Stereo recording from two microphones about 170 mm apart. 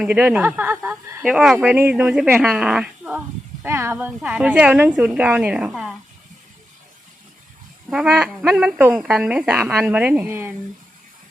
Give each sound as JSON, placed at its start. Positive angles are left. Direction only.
{"t": 0.0, "sound": "speech", "side_deg": -5}
{"t": 7.9, "sound": "speech", "side_deg": -5}